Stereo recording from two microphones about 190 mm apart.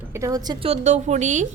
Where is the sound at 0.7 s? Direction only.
35° right (ahead or behind).